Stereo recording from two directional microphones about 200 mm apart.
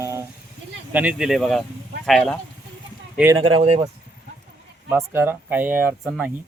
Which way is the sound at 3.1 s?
10° right (ahead or behind).